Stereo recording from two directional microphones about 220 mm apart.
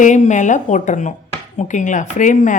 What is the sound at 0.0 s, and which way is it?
Speech, 35° left (ahead or behind).